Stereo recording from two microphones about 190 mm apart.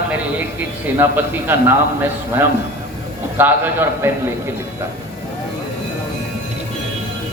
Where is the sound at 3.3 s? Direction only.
10° right (ahead or behind).